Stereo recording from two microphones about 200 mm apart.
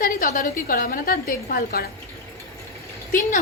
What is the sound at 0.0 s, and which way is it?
A woman's voice, 45° left (ahead or behind).